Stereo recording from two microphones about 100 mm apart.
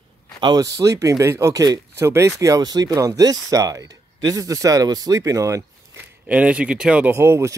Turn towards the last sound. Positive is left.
turn(degrees=-25)  # may be behind; listen again after turning